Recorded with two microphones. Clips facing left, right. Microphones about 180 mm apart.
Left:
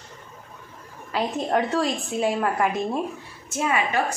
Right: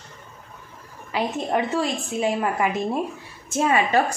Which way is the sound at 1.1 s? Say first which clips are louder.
Even; centre (ahead or behind).